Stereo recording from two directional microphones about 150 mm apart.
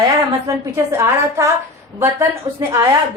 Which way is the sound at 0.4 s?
20° right (ahead or behind).